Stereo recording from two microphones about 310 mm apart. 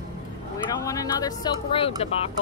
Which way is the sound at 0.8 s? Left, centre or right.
Centre.